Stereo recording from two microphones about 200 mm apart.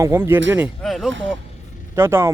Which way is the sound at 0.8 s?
Centre (ahead or behind).